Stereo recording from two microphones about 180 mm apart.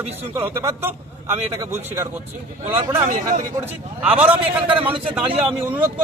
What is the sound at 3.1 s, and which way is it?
Speech, 50° right (ahead or behind).